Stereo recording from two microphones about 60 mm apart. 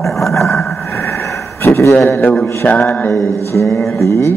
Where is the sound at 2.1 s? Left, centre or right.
Left.